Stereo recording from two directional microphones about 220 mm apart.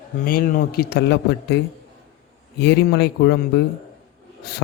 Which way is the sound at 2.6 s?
50° left (ahead or behind).